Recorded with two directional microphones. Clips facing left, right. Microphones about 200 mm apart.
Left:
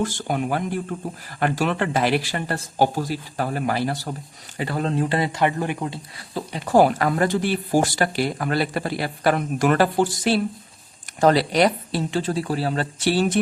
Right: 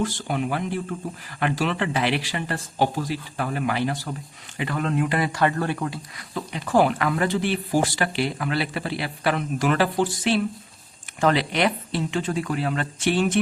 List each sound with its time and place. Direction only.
0.0 s speech: 45° left (ahead or behind)